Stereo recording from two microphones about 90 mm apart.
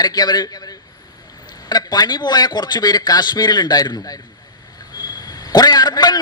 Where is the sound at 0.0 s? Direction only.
50° left (ahead or behind).